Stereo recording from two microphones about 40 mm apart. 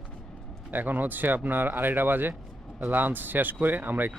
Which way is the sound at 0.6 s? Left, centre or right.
Right.